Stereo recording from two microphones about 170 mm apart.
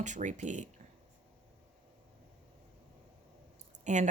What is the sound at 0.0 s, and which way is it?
Speech, 45° right (ahead or behind).